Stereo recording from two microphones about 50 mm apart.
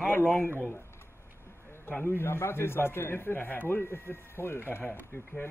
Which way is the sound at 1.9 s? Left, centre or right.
Left.